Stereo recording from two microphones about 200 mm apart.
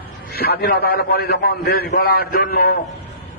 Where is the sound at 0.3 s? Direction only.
55° left (ahead or behind).